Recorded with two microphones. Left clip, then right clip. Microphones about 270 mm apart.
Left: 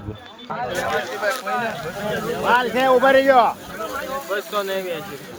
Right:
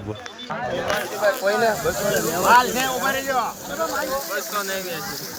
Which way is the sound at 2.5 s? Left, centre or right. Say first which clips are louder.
Left 1 dB; centre.